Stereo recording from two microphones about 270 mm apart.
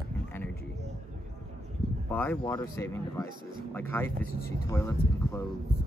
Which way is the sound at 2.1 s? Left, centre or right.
Centre.